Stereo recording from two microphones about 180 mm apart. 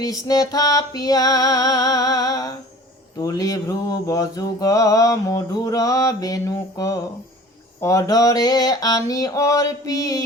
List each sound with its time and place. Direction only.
0.0 s mantra: 20° left (ahead or behind)